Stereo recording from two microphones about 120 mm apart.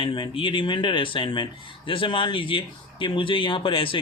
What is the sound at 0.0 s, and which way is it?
Speech, 45° left (ahead or behind).